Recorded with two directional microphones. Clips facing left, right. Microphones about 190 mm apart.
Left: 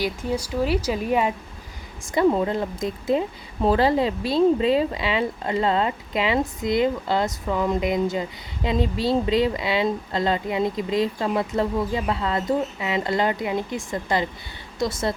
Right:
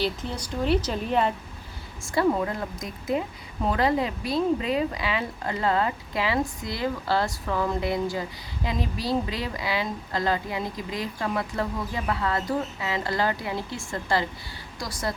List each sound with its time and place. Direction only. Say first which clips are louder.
0.0 s speech: left 4 dB; 10° left (ahead or behind)
2.1 s a woman's voice: left 4 dB; 25° left (ahead or behind)